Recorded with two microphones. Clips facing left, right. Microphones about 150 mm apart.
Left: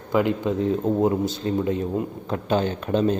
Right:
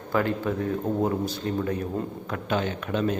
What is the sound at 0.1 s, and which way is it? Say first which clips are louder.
A man's voice: left 4 dB; 15° left (ahead or behind).